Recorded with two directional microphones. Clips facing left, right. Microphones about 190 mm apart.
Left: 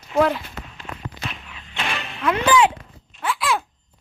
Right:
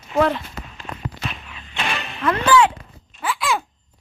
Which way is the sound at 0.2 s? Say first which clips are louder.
Even; centre (ahead or behind).